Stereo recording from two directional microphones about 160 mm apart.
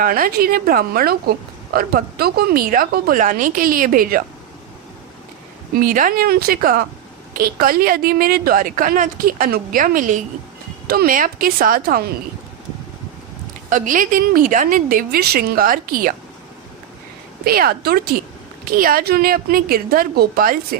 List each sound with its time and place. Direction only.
0.0 s a woman's voice: 65° right (ahead or behind)
5.8 s a woman's voice: 60° right (ahead or behind)
10.8 s a woman's voice: 70° right (ahead or behind)
13.7 s a woman's voice: 55° right (ahead or behind)
17.4 s a woman's voice: 70° right (ahead or behind)